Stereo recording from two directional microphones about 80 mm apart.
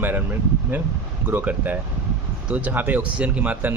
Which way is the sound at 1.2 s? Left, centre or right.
Right.